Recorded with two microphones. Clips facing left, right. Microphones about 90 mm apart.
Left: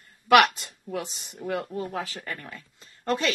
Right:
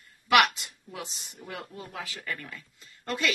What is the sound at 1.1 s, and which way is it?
Speech, 55° left (ahead or behind).